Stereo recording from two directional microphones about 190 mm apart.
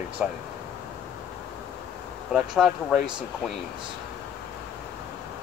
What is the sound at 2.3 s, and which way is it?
Speech, centre (ahead or behind).